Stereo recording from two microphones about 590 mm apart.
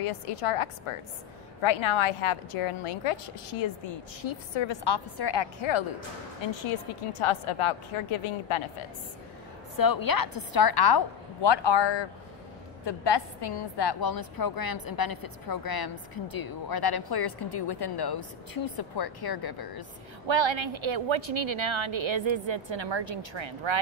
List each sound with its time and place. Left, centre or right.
0.0 s a woman's voice: left
9.8 s a woman's voice: left
20.2 s a woman's voice: right